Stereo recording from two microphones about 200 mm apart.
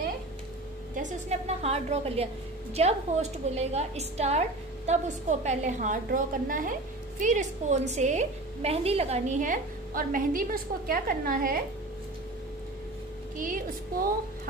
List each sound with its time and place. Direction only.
0.9 s a woman's voice: 30° right (ahead or behind)
13.4 s a woman's voice: 40° right (ahead or behind)